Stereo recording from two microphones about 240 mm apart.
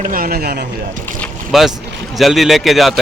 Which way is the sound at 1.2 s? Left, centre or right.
Centre.